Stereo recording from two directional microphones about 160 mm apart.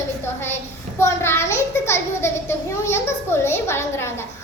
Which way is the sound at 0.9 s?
15° left (ahead or behind).